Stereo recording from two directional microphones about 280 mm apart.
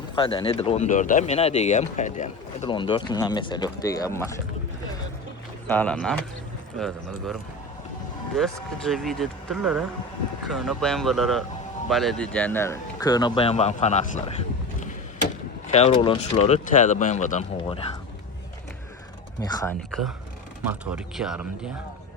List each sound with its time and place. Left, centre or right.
0.2 s speech: centre
5.6 s speech: centre
8.4 s speech: centre; by 14.3 s left
15.6 s speech: left
19.4 s speech: centre
19.9 s speech: centre